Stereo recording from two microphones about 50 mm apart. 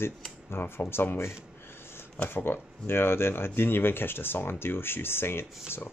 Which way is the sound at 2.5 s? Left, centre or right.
Left.